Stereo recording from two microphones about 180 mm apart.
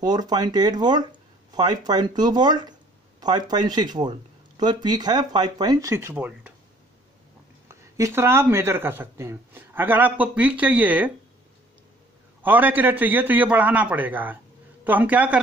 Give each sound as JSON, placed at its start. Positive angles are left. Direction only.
{"t": 0.0, "sound": "speech", "side_deg": -25}
{"t": 7.6, "sound": "speech", "side_deg": -15}
{"t": 12.4, "sound": "speech", "side_deg": -10}